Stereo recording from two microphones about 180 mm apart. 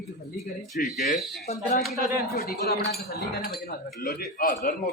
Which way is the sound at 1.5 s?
40° left (ahead or behind).